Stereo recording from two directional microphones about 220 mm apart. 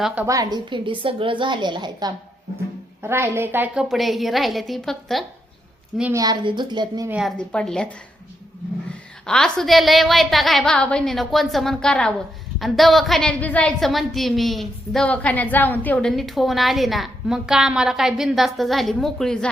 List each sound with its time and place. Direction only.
0.0 s a woman's voice: 5° right (ahead or behind)
6.0 s a woman's voice: 10° right (ahead or behind)
7.1 s a woman's voice: centre (ahead or behind)
9.2 s a woman's voice: 5° left (ahead or behind)